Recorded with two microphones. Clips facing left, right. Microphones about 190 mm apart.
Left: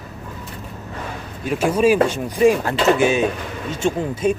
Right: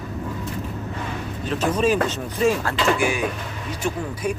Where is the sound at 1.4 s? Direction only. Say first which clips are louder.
Left 4 dB; 10° left (ahead or behind).